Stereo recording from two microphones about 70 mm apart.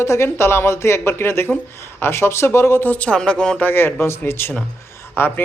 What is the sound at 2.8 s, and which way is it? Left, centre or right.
Speech, left.